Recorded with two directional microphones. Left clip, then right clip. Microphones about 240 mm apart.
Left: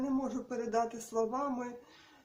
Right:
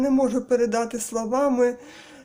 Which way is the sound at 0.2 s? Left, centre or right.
Right.